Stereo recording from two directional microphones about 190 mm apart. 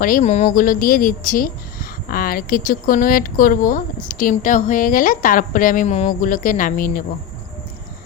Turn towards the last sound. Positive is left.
turn(degrees=45)  # may be behind; listen again after turning